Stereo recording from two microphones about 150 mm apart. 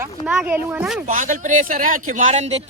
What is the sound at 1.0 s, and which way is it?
Speech, 60° right (ahead or behind).